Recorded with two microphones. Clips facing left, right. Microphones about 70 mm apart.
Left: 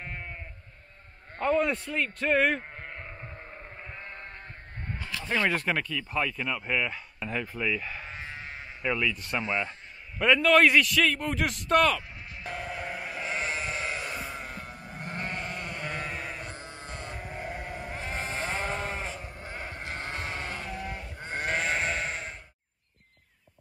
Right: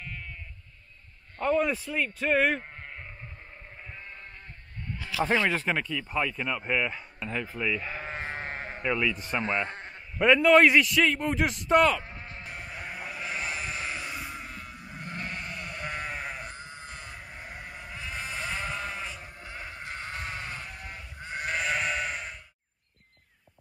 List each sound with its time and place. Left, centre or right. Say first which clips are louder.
0.0 s sheep: left 2 dB; left
1.6 s speech: even; centre
5.5 s speech: even; centre
8.0 s sheep: right 5 dB; right
8.8 s speech: even; centre
12.8 s sheep: left 2 dB; left
15.8 s sheep: right 2 dB; centre
16.5 s sheep: left 1 dB; left
19.8 s sheep: left 1 dB; left